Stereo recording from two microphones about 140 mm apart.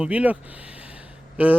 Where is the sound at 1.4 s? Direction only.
10° right (ahead or behind).